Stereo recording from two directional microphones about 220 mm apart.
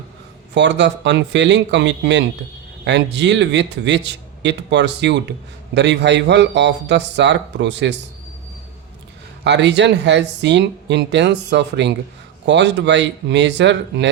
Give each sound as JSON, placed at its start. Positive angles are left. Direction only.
{"t": 0.5, "sound": "speech", "side_deg": -55}
{"t": 9.4, "sound": "speech", "side_deg": -50}